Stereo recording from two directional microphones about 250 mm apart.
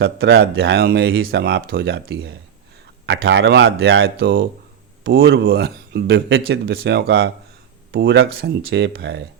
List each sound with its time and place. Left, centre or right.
0.0 s speech: right